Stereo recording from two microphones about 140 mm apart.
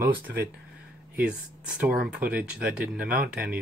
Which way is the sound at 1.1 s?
10° right (ahead or behind).